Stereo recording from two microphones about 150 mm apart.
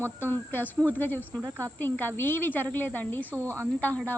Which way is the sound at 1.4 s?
20° right (ahead or behind).